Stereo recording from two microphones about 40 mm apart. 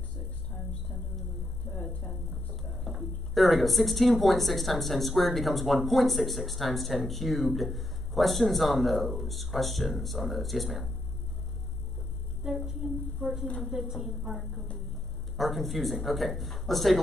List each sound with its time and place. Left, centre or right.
1.7 s speech: left
2.7 s speech: centre
12.4 s a woman's voice: centre